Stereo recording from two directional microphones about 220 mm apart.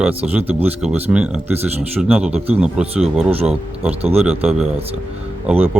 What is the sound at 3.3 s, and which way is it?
Speech, 25° right (ahead or behind).